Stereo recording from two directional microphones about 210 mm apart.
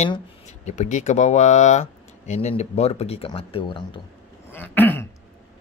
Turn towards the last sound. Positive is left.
turn(degrees=10)  # may be behind; listen again after turning